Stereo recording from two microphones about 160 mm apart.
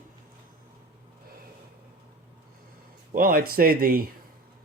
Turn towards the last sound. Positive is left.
turn(degrees=-65)  # may be behind; listen again after turning